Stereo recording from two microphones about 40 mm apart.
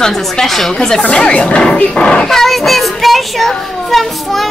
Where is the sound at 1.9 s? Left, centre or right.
Left.